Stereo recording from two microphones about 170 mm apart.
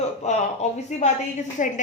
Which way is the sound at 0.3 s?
40° left (ahead or behind).